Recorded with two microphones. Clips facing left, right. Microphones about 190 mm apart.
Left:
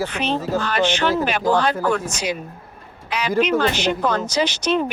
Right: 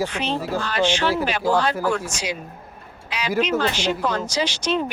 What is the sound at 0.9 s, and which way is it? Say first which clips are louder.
Speech: left 1 dB; 60° left (ahead or behind).